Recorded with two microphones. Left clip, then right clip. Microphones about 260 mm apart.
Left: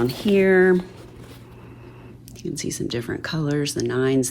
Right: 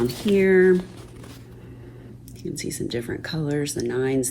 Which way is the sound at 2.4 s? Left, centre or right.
Left.